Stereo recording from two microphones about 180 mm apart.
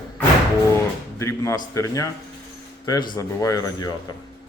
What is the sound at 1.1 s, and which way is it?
Speech, 15° left (ahead or behind).